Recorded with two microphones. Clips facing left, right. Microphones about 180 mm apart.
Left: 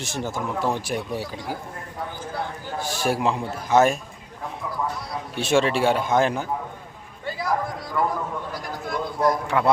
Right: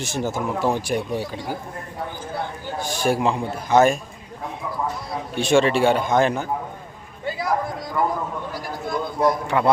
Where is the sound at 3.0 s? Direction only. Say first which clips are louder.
Right 3 dB; centre (ahead or behind).